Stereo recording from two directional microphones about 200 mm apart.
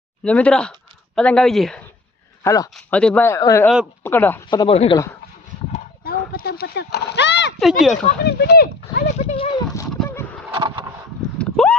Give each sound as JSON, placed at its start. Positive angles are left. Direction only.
{"t": 0.3, "sound": "speech", "side_deg": 5}
{"t": 2.4, "sound": "speech", "side_deg": 15}
{"t": 2.7, "sound": "speech", "side_deg": 5}
{"t": 4.4, "sound": "speech", "side_deg": 25}
{"t": 5.7, "sound": "horse", "side_deg": 45}
{"t": 7.6, "sound": "speech", "side_deg": 0}
{"t": 8.3, "sound": "speech", "side_deg": 55}
{"t": 9.1, "sound": "horse", "side_deg": 25}
{"t": 9.7, "sound": "a sound", "side_deg": 15}
{"t": 10.5, "sound": "a sound", "side_deg": -25}
{"t": 11.3, "sound": "a sound", "side_deg": 5}